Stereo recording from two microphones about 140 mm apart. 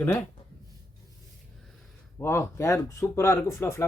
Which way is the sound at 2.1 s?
20° left (ahead or behind).